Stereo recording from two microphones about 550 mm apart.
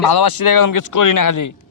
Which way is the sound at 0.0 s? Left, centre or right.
Left.